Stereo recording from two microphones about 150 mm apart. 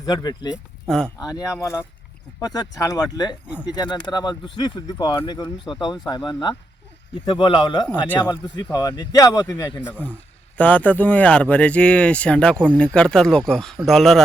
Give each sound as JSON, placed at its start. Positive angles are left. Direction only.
{"t": 0.0, "sound": "speech", "side_deg": 25}
{"t": 0.9, "sound": "speech", "side_deg": 5}
{"t": 1.2, "sound": "speech", "side_deg": 25}
{"t": 10.6, "sound": "speech", "side_deg": 10}